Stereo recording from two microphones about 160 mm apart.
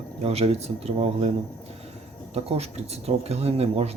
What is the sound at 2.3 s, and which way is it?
Speech, 40° right (ahead or behind).